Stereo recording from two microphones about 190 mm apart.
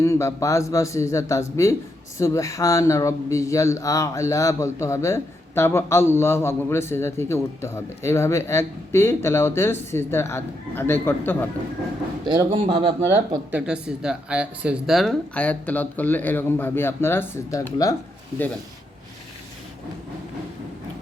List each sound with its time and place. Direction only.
0.0 s speech: 15° left (ahead or behind)
12.2 s a man's voice: 20° right (ahead or behind)
13.1 s speech: 10° right (ahead or behind); by 17.9 s 20° left (ahead or behind)